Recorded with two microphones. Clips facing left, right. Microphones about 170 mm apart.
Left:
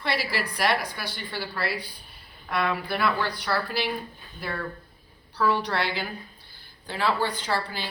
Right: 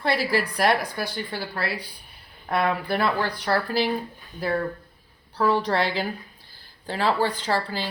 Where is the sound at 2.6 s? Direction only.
45° right (ahead or behind).